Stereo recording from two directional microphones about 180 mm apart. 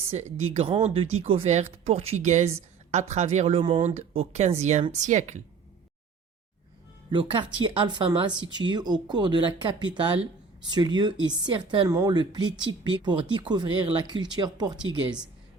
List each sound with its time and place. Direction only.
0.1 s speech: 35° right (ahead or behind)
7.1 s speech: 25° right (ahead or behind)